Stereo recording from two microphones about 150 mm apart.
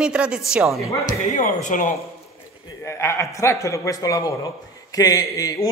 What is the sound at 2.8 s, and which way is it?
A man's voice, 20° left (ahead or behind).